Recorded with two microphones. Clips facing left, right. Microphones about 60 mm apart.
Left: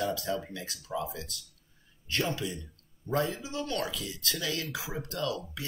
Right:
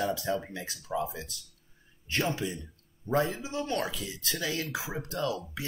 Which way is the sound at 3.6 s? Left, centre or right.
Right.